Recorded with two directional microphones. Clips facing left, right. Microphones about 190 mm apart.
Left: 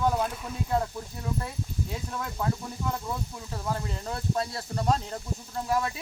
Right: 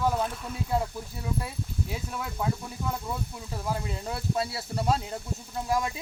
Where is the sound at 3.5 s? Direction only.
10° right (ahead or behind).